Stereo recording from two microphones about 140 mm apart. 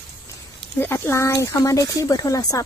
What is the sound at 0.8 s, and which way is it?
Speech, 20° left (ahead or behind).